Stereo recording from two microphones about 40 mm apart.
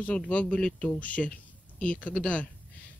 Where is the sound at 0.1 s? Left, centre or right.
Left.